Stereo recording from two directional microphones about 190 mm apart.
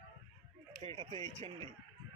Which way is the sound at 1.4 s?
25° right (ahead or behind).